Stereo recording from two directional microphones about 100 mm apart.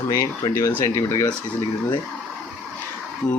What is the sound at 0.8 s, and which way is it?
Speech, 30° left (ahead or behind).